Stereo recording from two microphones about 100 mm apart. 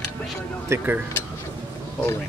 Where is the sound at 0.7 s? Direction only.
20° right (ahead or behind).